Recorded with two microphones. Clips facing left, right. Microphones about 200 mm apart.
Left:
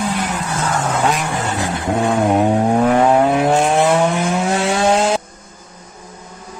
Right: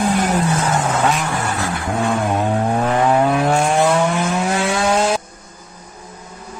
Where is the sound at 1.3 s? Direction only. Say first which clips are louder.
Left 1 dB; 20° left (ahead or behind).